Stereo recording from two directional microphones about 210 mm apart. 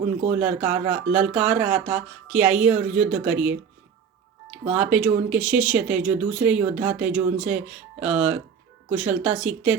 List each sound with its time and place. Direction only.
0.3 s speech: 5° right (ahead or behind)